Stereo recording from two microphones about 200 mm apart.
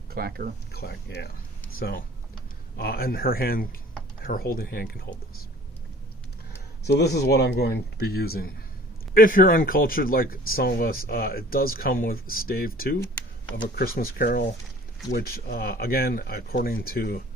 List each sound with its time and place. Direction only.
0.1 s speech: 50° right (ahead or behind)
0.7 s speech: 50° left (ahead or behind)
6.8 s speech: 55° left (ahead or behind)
13.7 s speech: 45° left (ahead or behind)